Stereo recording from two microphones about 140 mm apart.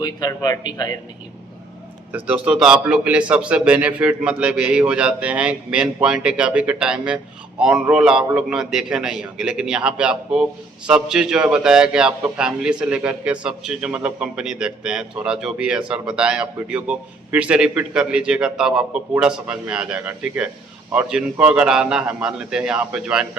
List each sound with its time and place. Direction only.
0.0 s a man's voice: 30° left (ahead or behind)
2.1 s a man's voice: 10° right (ahead or behind)